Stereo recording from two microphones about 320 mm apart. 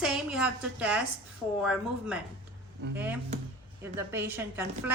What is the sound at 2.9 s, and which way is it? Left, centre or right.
A woman's voice, centre.